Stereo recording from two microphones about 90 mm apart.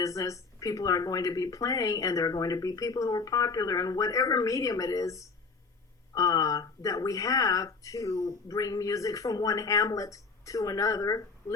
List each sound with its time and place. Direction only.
0.0 s a woman's voice: 35° left (ahead or behind)